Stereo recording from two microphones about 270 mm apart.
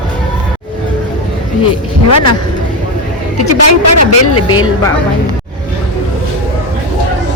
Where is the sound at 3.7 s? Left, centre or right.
Left.